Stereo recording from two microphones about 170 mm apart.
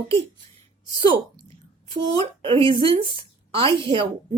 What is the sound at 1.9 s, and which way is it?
A woman's voice, 30° right (ahead or behind).